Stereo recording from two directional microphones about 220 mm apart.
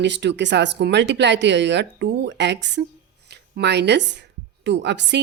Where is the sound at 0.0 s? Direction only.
50° right (ahead or behind).